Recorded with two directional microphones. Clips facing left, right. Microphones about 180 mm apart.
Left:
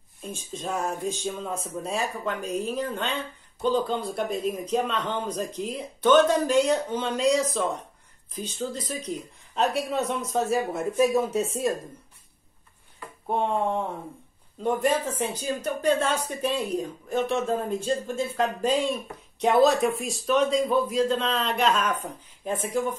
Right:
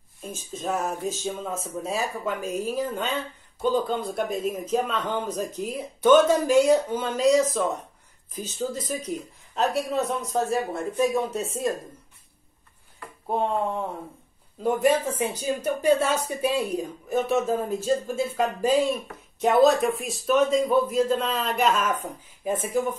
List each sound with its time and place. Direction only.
0.2 s a man's voice: 5° right (ahead or behind)
14.6 s a man's voice: 5° right (ahead or behind)